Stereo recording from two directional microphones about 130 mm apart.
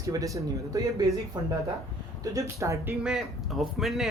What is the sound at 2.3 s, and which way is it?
Speech, 25° right (ahead or behind).